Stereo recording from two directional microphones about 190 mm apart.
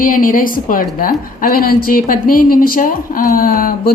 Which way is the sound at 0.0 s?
45° left (ahead or behind).